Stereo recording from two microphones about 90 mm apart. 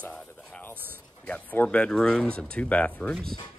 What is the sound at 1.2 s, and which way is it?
Speech, 15° left (ahead or behind).